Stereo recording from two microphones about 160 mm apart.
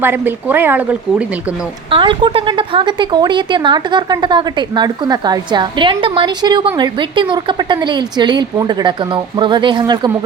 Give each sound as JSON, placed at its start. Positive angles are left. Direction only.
{"t": 0.0, "sound": "speech", "side_deg": -15}
{"t": 1.9, "sound": "a woman's voice", "side_deg": -30}